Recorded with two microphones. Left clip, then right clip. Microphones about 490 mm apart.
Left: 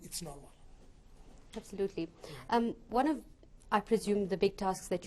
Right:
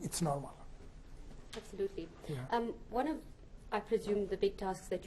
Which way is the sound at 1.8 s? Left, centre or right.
Left.